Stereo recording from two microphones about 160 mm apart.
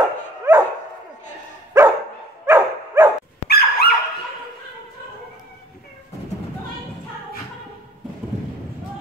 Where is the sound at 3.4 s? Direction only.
80° left.